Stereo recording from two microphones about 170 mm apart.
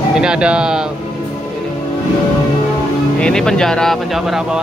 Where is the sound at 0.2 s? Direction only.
5° right (ahead or behind).